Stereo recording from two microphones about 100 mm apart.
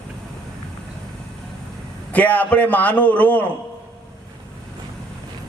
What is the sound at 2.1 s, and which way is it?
A man's voice, 15° left (ahead or behind).